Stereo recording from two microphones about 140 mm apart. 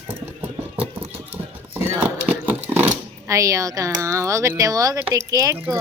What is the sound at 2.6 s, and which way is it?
A woman's voice, 10° right (ahead or behind).